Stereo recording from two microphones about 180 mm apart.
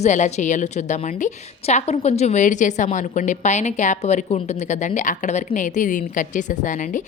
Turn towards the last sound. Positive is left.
turn(degrees=45)  # may be behind; listen again after turning